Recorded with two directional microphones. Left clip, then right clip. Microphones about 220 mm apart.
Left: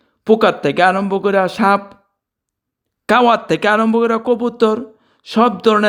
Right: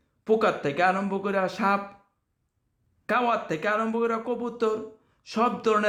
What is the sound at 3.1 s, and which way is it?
Speech, 45° left (ahead or behind).